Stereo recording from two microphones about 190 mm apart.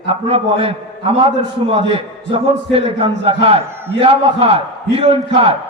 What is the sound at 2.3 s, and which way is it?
A man's voice, 30° right (ahead or behind).